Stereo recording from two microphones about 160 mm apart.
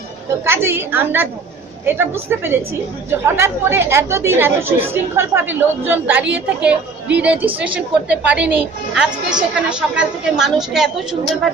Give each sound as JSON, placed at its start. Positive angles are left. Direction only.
{"t": 0.5, "sound": "a woman's voice", "side_deg": -15}